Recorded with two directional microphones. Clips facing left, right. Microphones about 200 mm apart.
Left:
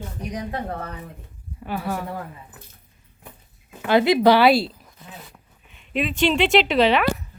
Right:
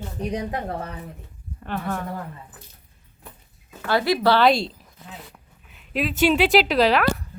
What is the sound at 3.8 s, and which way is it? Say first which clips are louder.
Speech: left 4 dB; 20° left (ahead or behind).